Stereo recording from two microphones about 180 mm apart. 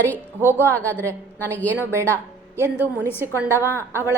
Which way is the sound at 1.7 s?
15° right (ahead or behind).